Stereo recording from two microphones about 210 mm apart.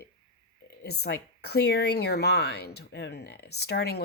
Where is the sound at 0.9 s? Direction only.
50° left (ahead or behind).